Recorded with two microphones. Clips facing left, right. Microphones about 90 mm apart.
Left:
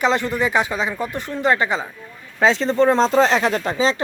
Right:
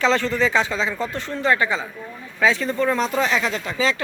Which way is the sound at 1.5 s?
25° left (ahead or behind).